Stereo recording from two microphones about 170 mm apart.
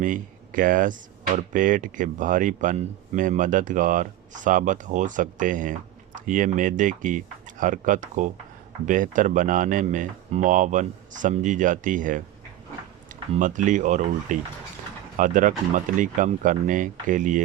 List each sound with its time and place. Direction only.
0.0 s speech: 50° right (ahead or behind)
13.4 s speech: 50° right (ahead or behind)